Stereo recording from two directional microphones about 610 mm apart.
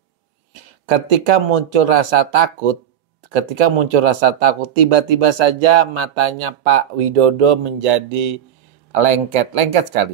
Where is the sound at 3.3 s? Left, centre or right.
Right.